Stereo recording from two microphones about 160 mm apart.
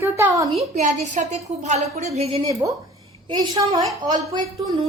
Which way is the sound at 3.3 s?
25° right (ahead or behind).